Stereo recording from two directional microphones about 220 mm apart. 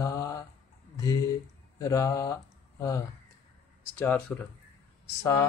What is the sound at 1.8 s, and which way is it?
Speech, 15° left (ahead or behind).